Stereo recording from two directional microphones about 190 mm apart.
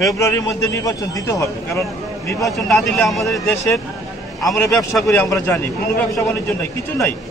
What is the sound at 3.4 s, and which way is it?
A man's voice, 15° left (ahead or behind).